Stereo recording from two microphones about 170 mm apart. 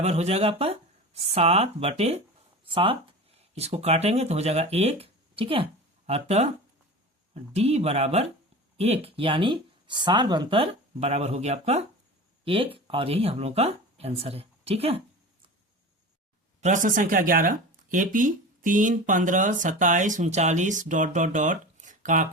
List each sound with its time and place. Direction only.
0.0 s speech: 40° right (ahead or behind)
16.6 s speech: 45° right (ahead or behind)